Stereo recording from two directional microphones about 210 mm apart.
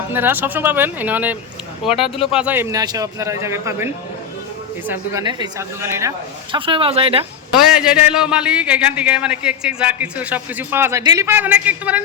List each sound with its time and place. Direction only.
0.1 s a man's voice: 10° right (ahead or behind)
4.9 s a woman's voice: 15° right (ahead or behind)
7.5 s a man's voice: 5° right (ahead or behind)